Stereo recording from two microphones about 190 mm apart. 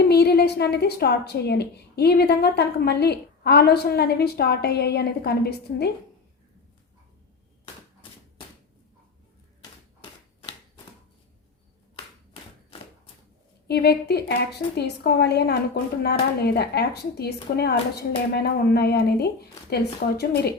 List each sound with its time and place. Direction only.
0.1 s a woman's voice: 60° left (ahead or behind)
13.7 s a woman's voice: 60° left (ahead or behind)